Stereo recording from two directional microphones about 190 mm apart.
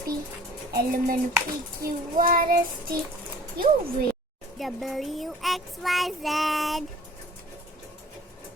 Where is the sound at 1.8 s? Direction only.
50° right (ahead or behind).